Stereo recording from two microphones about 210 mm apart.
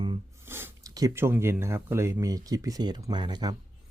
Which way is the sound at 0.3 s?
10° right (ahead or behind).